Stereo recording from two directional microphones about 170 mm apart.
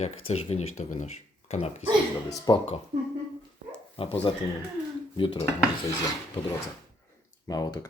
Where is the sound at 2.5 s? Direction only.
20° left (ahead or behind).